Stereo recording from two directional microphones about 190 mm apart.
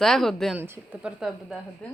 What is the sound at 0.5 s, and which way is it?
Speech, 10° right (ahead or behind).